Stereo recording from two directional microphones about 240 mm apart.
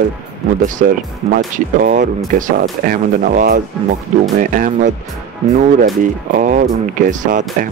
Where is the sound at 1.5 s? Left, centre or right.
Right.